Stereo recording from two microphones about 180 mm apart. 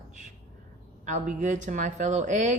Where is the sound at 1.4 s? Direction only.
40° right (ahead or behind).